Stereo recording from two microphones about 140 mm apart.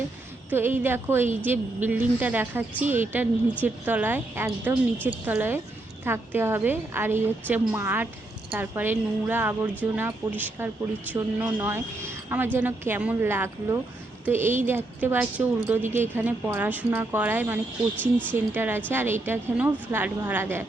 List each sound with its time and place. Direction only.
0.5 s a woman's voice: 15° right (ahead or behind)
18.0 s speech: 10° left (ahead or behind)
18.3 s a woman's voice: 15° right (ahead or behind)